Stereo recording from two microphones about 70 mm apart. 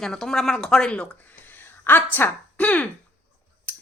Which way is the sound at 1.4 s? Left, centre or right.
Left.